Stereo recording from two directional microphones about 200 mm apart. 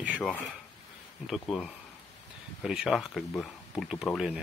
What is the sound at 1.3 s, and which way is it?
Speech, centre (ahead or behind).